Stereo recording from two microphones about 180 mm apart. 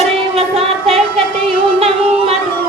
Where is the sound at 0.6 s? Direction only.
35° right (ahead or behind).